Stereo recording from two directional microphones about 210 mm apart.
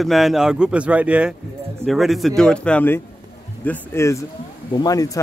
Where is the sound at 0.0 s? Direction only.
Centre (ahead or behind).